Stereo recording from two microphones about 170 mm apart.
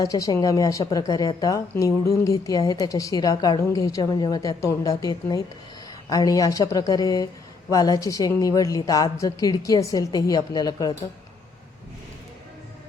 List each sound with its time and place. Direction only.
0.0 s a woman's voice: 20° left (ahead or behind)